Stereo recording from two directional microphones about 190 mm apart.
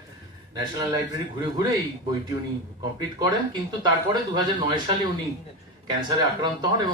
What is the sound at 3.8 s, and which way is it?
A man's voice, 25° right (ahead or behind).